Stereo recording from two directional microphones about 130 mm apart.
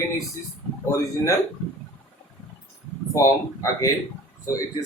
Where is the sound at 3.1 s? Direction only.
25° left (ahead or behind).